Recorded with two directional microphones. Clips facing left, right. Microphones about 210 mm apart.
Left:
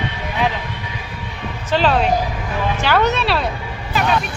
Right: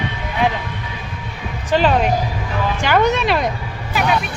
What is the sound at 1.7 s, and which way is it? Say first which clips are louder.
Speech: right 1 dB; 15° right (ahead or behind).